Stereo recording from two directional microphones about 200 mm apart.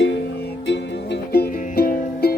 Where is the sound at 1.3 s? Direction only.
50° left (ahead or behind).